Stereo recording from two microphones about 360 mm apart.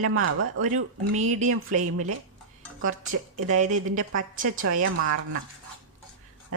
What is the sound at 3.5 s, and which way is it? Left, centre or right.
Speech, right.